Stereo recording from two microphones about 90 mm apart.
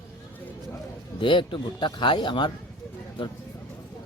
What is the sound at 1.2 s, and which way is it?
Speech, 65° left (ahead or behind).